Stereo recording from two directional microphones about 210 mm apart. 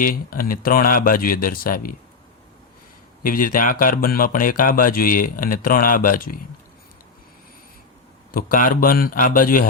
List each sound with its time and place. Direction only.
0.0 s speech: 40° left (ahead or behind)
3.2 s a man's voice: 40° left (ahead or behind)
8.3 s a man's voice: 40° left (ahead or behind)